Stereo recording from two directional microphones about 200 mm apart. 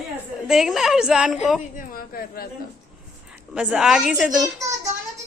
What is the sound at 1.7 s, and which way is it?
Speech, 45° left (ahead or behind).